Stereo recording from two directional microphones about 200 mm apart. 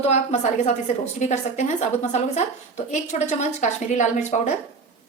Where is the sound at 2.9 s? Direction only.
35° left (ahead or behind).